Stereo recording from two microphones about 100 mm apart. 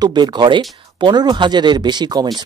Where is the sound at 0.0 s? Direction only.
45° right (ahead or behind).